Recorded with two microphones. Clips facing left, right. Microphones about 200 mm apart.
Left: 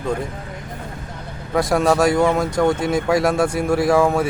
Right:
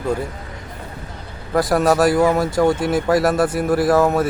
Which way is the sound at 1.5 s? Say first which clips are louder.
Right 1 dB; 5° right (ahead or behind).